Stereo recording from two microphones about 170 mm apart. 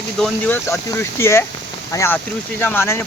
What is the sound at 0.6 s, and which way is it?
Speech, 20° left (ahead or behind).